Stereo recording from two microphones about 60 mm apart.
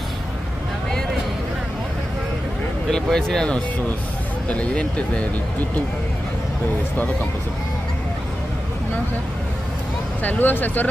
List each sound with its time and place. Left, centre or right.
2.9 s speech: centre
10.2 s speech: left